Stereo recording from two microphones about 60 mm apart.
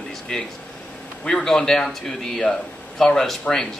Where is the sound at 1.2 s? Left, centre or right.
Centre.